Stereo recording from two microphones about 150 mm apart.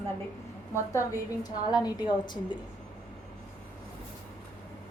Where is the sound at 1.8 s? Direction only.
30° left (ahead or behind).